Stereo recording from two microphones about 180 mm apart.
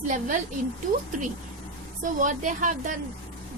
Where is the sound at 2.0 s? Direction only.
45° right (ahead or behind).